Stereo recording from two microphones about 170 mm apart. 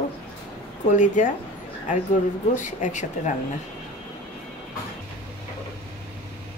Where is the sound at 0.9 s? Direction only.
45° left (ahead or behind).